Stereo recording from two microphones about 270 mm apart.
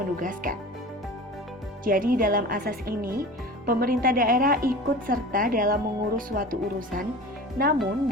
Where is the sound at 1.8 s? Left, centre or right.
Right.